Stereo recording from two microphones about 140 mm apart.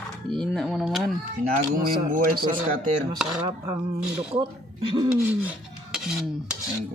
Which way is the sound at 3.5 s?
35° right (ahead or behind).